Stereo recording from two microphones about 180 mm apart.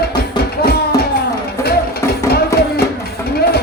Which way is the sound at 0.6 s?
60° left (ahead or behind).